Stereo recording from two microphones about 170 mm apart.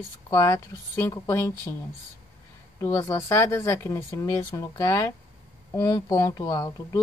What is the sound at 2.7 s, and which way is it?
Speech, 20° left (ahead or behind).